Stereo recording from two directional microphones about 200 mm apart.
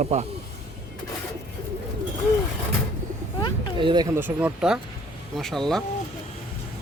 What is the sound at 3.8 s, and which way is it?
Speech, 20° right (ahead or behind).